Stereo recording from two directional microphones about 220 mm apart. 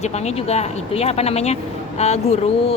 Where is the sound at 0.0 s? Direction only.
30° left (ahead or behind).